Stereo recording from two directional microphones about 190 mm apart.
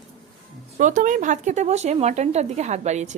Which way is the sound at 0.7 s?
40° right (ahead or behind).